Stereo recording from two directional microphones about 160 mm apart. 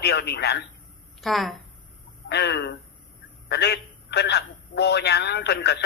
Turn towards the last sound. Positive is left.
turn(degrees=90)